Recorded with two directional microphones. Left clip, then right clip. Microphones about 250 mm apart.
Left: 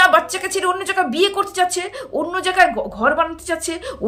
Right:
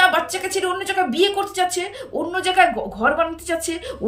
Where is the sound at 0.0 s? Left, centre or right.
Centre.